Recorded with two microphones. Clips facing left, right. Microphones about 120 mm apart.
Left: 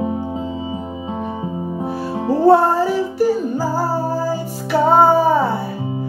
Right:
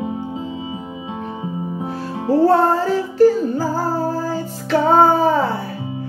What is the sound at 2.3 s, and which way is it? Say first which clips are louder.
Music: left 1 dB; 15° left (ahead or behind).